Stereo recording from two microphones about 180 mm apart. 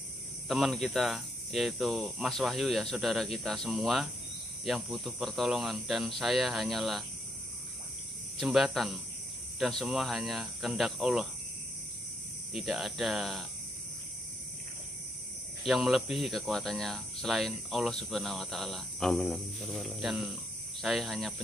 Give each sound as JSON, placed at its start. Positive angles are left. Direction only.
{"t": 0.5, "sound": "speech", "side_deg": 0}
{"t": 8.4, "sound": "speech", "side_deg": 0}
{"t": 12.5, "sound": "speech", "side_deg": 0}
{"t": 15.6, "sound": "speech", "side_deg": 0}